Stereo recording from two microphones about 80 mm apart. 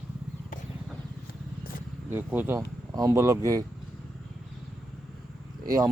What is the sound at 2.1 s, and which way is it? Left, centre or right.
Speech, right.